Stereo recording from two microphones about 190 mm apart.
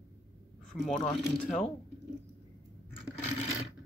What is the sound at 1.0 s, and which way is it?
Speech, 30° left (ahead or behind).